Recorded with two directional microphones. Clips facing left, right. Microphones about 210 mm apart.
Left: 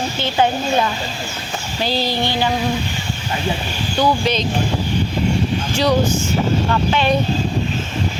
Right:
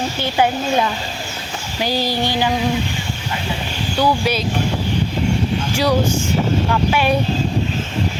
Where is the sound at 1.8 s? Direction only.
10° right (ahead or behind).